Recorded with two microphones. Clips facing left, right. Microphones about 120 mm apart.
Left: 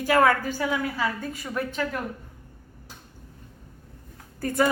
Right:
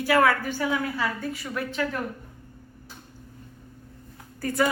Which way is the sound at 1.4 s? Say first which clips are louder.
Left 2 dB; 15° left (ahead or behind).